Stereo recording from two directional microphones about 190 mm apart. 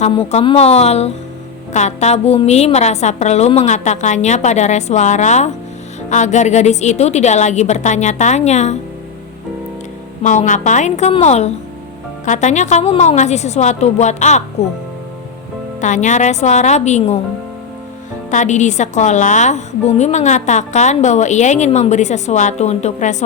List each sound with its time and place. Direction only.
0.0 s a woman's voice: 35° left (ahead or behind)
10.2 s a woman's voice: 40° left (ahead or behind)
15.8 s a woman's voice: 40° left (ahead or behind)
18.3 s a woman's voice: 40° left (ahead or behind)